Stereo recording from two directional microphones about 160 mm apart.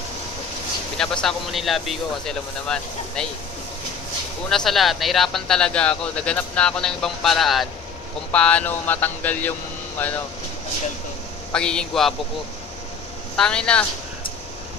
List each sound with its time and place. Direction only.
0.9 s speech: 5° left (ahead or behind)
4.5 s speech: centre (ahead or behind)
11.5 s speech: 5° left (ahead or behind)
13.4 s speech: 5° left (ahead or behind)